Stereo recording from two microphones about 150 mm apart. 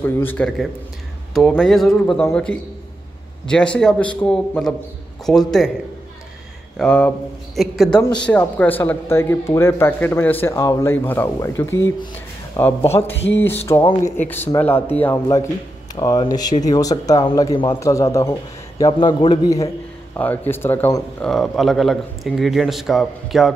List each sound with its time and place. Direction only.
0.0 s a man's voice: 15° left (ahead or behind)
3.4 s a man's voice: 5° left (ahead or behind)
6.8 s a man's voice: 10° left (ahead or behind)
15.9 s speech: 25° left (ahead or behind)
18.9 s a man's voice: 30° left (ahead or behind); by 21.3 s 15° left (ahead or behind)
21.3 s a man's voice: centre (ahead or behind)